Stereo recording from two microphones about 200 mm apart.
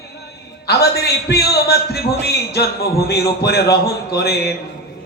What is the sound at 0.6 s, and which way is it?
A man's voice, 55° left (ahead or behind).